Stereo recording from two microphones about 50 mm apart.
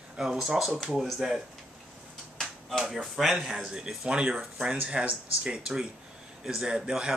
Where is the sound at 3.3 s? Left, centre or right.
Centre.